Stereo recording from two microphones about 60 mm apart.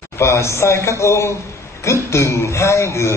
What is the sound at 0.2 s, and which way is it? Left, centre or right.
A man's voice, left.